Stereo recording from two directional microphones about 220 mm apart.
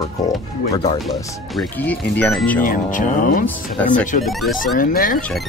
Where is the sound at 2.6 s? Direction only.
35° left (ahead or behind).